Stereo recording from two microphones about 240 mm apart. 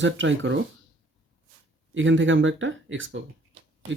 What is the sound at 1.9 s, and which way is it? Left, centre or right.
Speech, right.